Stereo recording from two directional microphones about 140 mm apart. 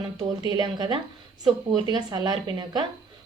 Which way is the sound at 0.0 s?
30° right (ahead or behind).